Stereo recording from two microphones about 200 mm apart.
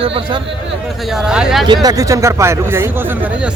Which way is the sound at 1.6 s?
20° right (ahead or behind).